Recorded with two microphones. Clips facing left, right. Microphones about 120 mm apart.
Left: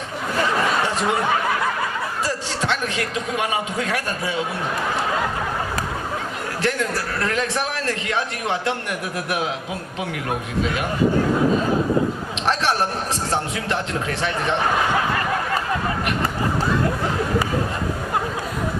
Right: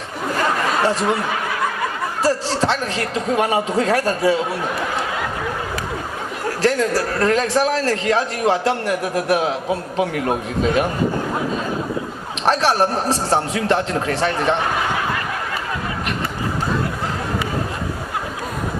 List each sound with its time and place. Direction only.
2.2 s a sound: 40° right (ahead or behind)
3.3 s a man's voice: 40° right (ahead or behind)
6.6 s a man's voice: 35° right (ahead or behind)
12.5 s a man's voice: 35° right (ahead or behind)